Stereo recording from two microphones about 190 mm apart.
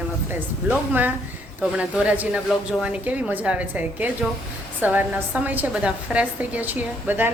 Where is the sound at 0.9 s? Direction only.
10° right (ahead or behind).